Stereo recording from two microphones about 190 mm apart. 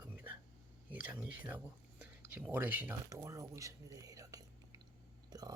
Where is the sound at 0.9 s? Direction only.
10° right (ahead or behind).